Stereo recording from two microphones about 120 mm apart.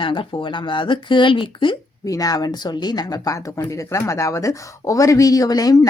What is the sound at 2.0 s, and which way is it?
Speech, 30° left (ahead or behind).